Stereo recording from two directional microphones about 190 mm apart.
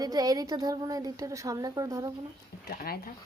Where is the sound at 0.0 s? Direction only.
20° right (ahead or behind).